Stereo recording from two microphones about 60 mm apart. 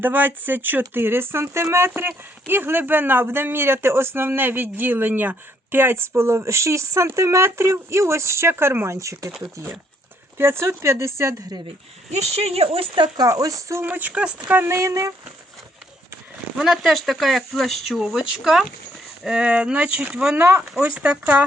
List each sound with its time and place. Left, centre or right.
0.0 s speech: right
9.0 s speech: right
10.3 s speech: right
13.1 s speech: right
13.8 s speech: right
14.6 s speech: right
16.6 s speech: centre
18.0 s speech: centre
20.3 s speech: right
20.8 s speech: right